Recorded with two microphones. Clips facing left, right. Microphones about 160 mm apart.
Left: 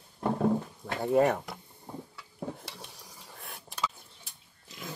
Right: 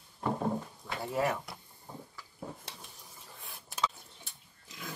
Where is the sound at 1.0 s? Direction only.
55° left (ahead or behind).